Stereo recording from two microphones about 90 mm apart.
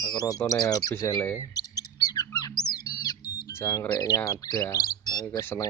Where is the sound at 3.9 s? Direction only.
45° left (ahead or behind).